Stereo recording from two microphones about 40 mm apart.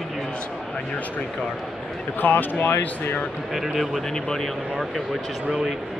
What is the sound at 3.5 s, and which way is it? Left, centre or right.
Speech, centre.